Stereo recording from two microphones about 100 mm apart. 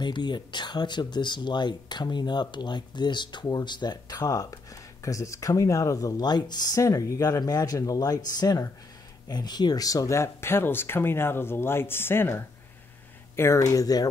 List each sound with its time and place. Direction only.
0.0 s speech: 50° left (ahead or behind)